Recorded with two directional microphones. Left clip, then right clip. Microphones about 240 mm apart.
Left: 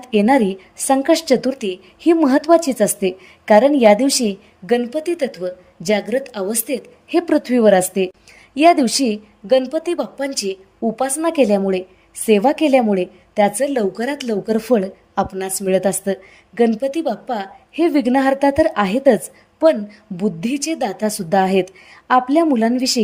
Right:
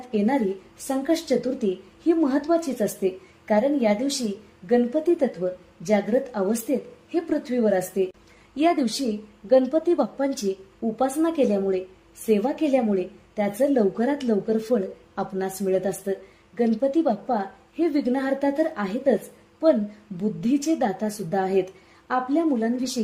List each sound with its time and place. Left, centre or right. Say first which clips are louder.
0.1 s a woman's voice: left 9 dB; left
20.1 s a woman's voice: left 4 dB; left